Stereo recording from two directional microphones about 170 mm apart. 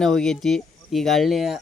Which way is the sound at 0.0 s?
5° left (ahead or behind).